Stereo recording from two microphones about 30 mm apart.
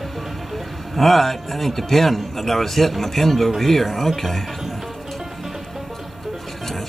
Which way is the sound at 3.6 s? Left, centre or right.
Centre.